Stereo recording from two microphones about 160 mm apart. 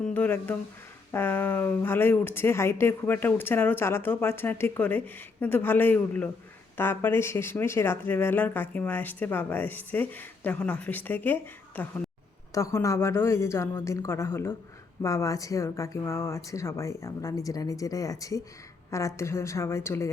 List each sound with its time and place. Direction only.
0.0 s speech: 10° left (ahead or behind)
12.5 s speech: 20° left (ahead or behind)